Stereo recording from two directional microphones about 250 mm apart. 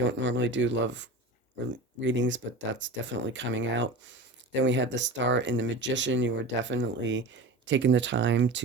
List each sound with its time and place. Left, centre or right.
0.0 s speech: right